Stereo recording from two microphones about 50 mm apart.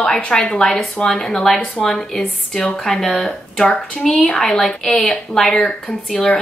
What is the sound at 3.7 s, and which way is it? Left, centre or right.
A woman's voice, centre.